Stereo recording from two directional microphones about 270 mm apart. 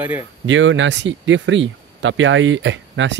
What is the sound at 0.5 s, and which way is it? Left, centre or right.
Speech, right.